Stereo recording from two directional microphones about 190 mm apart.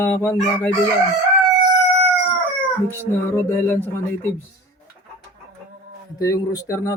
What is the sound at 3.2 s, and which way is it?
Chicken, 10° left (ahead or behind).